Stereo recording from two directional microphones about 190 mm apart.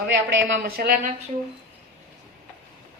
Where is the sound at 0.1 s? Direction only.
70° right (ahead or behind); by 1.1 s 50° right (ahead or behind).